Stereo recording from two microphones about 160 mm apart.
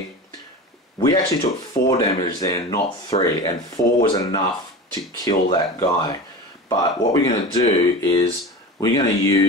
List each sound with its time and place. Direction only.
0.9 s speech: 30° left (ahead or behind)